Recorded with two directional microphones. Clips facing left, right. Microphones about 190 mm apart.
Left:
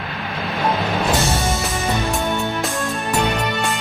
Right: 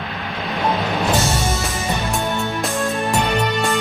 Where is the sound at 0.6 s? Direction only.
Centre (ahead or behind).